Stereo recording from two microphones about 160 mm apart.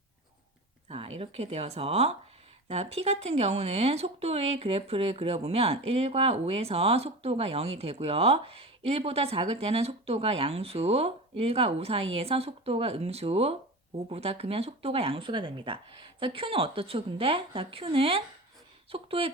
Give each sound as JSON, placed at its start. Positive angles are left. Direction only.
{"t": 0.9, "sound": "speech", "side_deg": -40}